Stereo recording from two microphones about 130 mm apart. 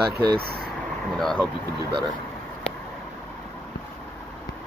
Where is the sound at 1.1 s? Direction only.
5° left (ahead or behind).